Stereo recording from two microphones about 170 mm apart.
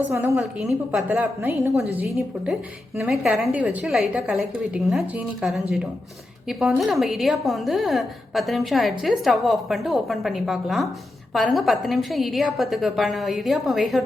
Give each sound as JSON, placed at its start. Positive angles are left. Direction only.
{"t": 0.1, "sound": "a woman's voice", "side_deg": -15}
{"t": 0.3, "sound": "a woman's voice", "side_deg": 0}
{"t": 3.0, "sound": "a woman's voice", "side_deg": 0}